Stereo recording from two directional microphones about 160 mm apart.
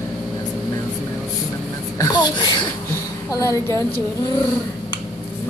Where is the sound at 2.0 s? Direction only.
25° left (ahead or behind).